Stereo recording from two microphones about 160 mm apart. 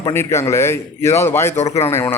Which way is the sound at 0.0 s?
15° left (ahead or behind).